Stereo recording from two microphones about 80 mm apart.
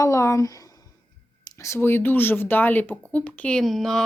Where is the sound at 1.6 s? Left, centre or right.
Left; by 3.6 s centre.